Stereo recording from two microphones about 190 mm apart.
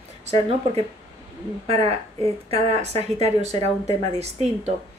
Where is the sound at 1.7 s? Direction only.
30° right (ahead or behind).